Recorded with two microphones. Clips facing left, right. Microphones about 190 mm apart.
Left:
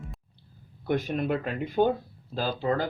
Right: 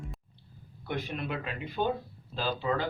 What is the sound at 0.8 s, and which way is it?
Speech, 45° left (ahead or behind).